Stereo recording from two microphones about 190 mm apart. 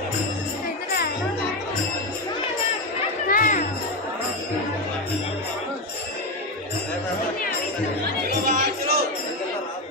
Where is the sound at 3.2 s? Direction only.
45° left (ahead or behind).